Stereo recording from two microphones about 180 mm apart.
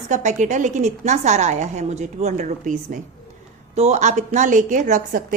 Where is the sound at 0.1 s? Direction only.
45° right (ahead or behind).